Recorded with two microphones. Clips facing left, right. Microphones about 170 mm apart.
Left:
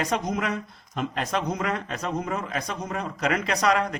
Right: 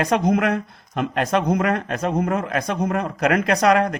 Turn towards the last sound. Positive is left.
turn(degrees=-55)  # may be behind; listen again after turning